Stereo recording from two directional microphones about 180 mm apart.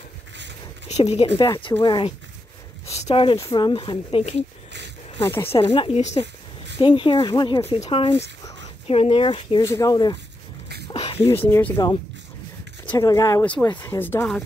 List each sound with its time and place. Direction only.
0.8 s a woman's voice: 35° left (ahead or behind)
3.3 s speech: 20° left (ahead or behind)
5.5 s a woman's voice: 30° left (ahead or behind)
6.8 s a woman's voice: 30° left (ahead or behind)
9.6 s speech: 15° left (ahead or behind)
10.9 s a sound: 30° left (ahead or behind)
11.4 s speech: 10° left (ahead or behind)